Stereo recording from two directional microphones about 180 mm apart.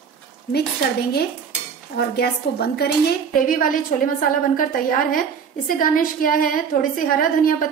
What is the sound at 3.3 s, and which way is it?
A woman's voice, 50° left (ahead or behind).